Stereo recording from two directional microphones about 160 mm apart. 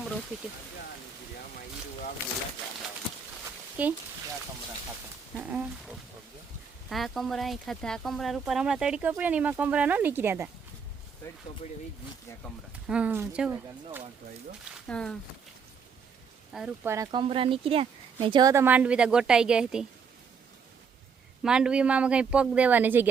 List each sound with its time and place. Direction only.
3.8 s speech: 10° right (ahead or behind)
5.4 s speech: 10° right (ahead or behind)
6.9 s speech: centre (ahead or behind)
11.6 s speech: 40° left (ahead or behind)
12.9 s speech: 10° right (ahead or behind)
14.8 s speech: 5° left (ahead or behind)
16.5 s speech: centre (ahead or behind)
16.8 s speech: 15° right (ahead or behind)
17.1 s speech: 30° right (ahead or behind); by 19.9 s 5° right (ahead or behind)
21.4 s speech: 5° right (ahead or behind)